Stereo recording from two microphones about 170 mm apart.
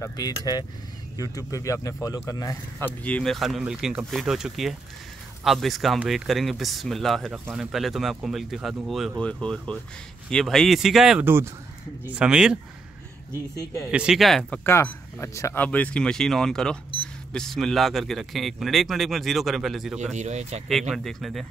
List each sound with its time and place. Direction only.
0.0 s speech: 25° left (ahead or behind)
3.0 s speech: 5° left (ahead or behind)
13.8 s speech: 5° right (ahead or behind)
14.6 s speech: 15° left (ahead or behind); by 20.1 s 5° right (ahead or behind)
20.1 s speech: 40° right (ahead or behind)
20.9 s speech: centre (ahead or behind)